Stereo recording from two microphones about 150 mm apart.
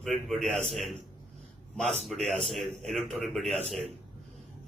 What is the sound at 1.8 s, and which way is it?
Speech, 45° right (ahead or behind).